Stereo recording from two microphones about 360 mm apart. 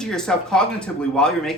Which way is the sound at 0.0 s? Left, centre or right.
Centre.